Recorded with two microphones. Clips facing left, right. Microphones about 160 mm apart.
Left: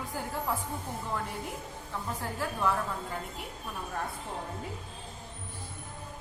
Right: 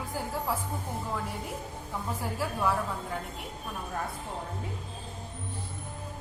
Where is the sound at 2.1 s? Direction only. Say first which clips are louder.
Right 2 dB; 10° right (ahead or behind).